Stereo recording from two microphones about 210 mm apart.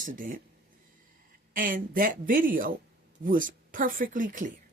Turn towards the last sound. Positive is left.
turn(degrees=-40)  # may be behind; listen again after turning